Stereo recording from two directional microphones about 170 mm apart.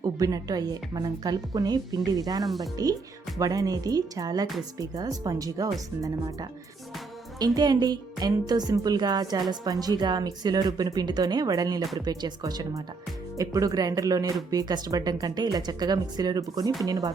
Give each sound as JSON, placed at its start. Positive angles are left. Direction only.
{"t": 0.0, "sound": "a woman's voice", "side_deg": -20}